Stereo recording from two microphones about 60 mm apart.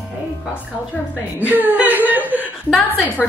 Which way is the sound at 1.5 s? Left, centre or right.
Right.